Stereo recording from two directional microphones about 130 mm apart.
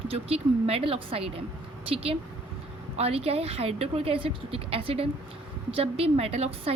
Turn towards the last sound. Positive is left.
turn(degrees=-50)  # may be behind; listen again after turning